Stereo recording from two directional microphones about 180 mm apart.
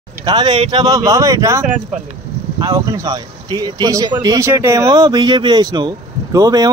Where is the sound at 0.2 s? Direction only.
25° right (ahead or behind).